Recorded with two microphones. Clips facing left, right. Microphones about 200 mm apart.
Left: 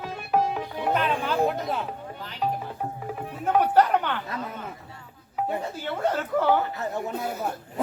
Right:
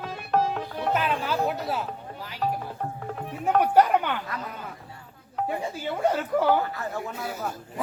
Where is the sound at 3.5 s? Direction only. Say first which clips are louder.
Even; 10° right (ahead or behind).